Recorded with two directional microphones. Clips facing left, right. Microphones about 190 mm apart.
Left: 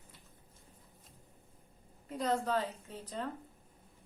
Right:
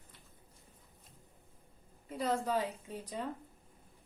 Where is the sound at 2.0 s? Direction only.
5° right (ahead or behind).